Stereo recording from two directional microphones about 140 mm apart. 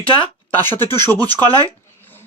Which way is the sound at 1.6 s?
15° left (ahead or behind).